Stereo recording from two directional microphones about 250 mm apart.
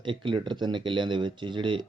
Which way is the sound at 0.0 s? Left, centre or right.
Centre.